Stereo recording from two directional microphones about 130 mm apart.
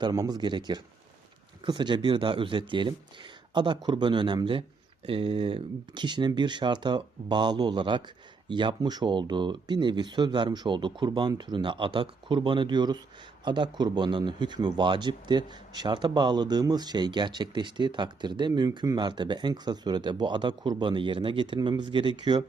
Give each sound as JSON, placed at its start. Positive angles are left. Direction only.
{"t": 0.0, "sound": "speech", "side_deg": -30}